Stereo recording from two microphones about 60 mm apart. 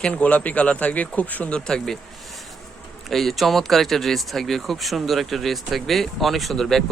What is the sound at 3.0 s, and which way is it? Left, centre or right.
Speech, centre.